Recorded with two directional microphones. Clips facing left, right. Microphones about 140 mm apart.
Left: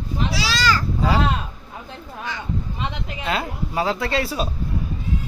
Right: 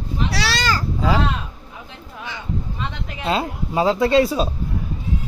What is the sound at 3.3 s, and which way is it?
Speech, 25° right (ahead or behind).